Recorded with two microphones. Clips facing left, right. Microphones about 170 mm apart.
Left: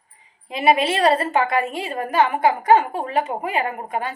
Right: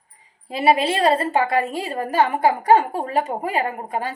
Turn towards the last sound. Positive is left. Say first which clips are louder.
# even
turn(degrees=-35)  # may be behind; listen again after turning